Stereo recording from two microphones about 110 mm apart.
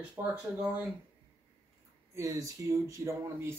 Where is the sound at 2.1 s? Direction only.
30° right (ahead or behind).